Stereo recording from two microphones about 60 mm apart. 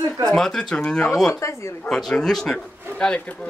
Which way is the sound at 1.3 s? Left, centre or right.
Left.